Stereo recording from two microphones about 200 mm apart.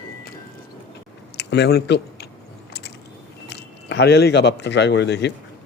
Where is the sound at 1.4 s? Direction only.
55° left (ahead or behind).